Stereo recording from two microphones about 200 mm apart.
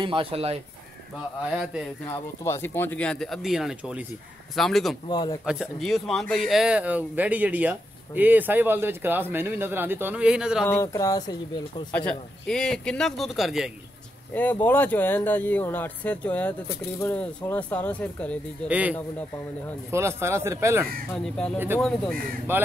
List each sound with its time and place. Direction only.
0.0 s speech: 25° right (ahead or behind)
1.4 s speech: 5° right (ahead or behind)
2.0 s speech: 10° left (ahead or behind)
5.0 s speech: 20° left (ahead or behind)
5.4 s speech: 5° right (ahead or behind)
10.6 s speech: 15° left (ahead or behind)
12.1 s speech: 5° left (ahead or behind)
14.3 s speech: 10° left (ahead or behind)
18.7 s speech: 5° right (ahead or behind)
21.1 s speech: 5° left (ahead or behind)
22.5 s speech: 10° right (ahead or behind)